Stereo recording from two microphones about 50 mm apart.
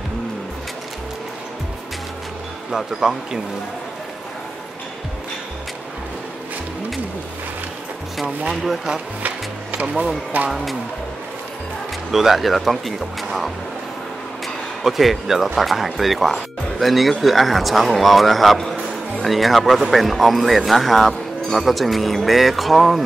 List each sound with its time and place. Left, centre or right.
2.7 s speech: centre
8.5 s speech: centre
9.2 s music: right
10.5 s speech: centre
12.1 s speech: centre
14.8 s speech: centre